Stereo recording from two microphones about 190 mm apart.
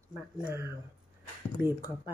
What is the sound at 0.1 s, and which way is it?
Speech, 5° right (ahead or behind).